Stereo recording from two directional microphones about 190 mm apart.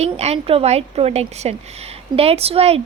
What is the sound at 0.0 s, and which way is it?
A woman's voice, 35° right (ahead or behind).